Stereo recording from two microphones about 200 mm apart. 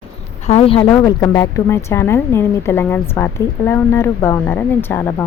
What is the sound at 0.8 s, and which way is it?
Speech, 15° left (ahead or behind).